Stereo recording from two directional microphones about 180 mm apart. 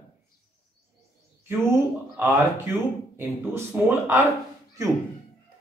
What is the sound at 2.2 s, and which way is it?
A man's voice, 15° right (ahead or behind).